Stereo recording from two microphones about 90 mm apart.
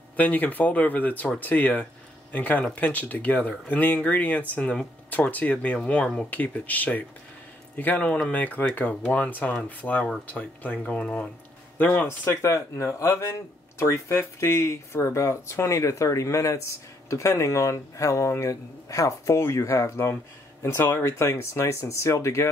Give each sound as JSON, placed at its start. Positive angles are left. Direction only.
{"t": 0.1, "sound": "speech", "side_deg": 20}